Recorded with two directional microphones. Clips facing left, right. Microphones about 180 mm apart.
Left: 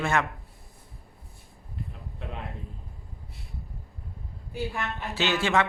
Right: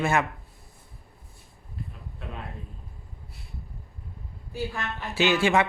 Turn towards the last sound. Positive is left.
turn(degrees=-10)  # may be behind; listen again after turning